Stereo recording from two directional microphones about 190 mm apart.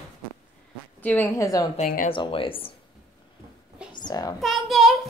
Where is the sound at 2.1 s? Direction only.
25° left (ahead or behind).